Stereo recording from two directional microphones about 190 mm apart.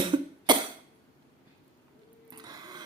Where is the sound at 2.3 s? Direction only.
20° right (ahead or behind).